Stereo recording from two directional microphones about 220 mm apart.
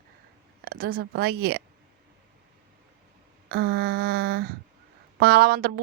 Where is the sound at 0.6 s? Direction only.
45° right (ahead or behind).